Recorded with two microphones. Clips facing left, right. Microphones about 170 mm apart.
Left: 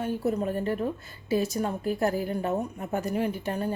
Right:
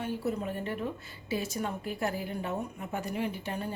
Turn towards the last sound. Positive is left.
turn(degrees=45)  # may be behind; listen again after turning